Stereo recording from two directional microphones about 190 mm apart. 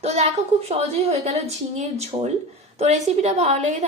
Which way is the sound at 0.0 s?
35° right (ahead or behind).